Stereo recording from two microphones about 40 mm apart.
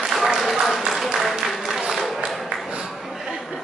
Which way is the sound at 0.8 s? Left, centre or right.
Centre.